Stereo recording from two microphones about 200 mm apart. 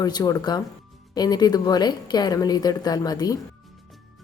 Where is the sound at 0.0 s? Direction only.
20° left (ahead or behind).